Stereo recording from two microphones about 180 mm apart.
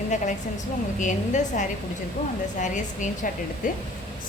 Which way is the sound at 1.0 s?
45° left (ahead or behind).